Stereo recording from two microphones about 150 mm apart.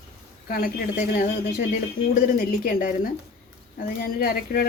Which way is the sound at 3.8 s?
80° left.